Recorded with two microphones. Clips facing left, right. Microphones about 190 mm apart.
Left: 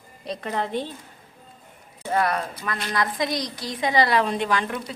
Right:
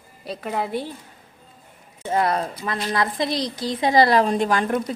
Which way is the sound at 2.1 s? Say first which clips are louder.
Right 2 dB; 25° right (ahead or behind).